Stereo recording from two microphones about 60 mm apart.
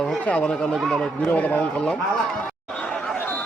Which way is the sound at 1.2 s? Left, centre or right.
Left.